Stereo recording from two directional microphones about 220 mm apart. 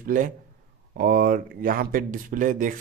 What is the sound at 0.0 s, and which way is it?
A man's voice, 35° right (ahead or behind).